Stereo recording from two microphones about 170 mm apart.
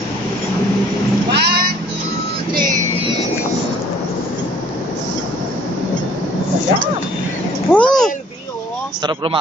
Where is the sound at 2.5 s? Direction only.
50° right (ahead or behind).